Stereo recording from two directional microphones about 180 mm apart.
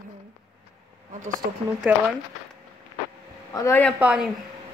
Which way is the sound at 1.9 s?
10° right (ahead or behind).